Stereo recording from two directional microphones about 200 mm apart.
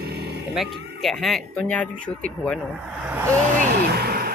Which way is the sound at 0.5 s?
Centre (ahead or behind).